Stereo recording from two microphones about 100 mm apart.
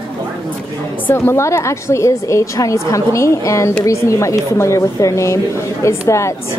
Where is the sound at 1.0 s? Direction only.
25° left (ahead or behind).